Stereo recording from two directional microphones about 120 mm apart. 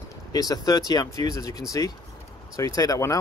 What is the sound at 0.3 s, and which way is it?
Speech, 30° left (ahead or behind).